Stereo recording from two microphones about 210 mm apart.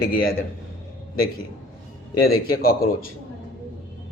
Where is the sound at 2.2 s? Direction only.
45° left (ahead or behind).